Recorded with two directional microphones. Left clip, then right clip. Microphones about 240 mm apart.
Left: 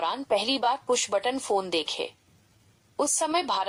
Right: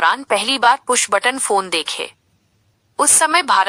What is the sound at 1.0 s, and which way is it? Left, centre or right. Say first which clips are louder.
Speech: right 10 dB; right.